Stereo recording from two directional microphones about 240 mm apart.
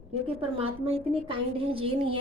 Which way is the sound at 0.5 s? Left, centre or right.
Right.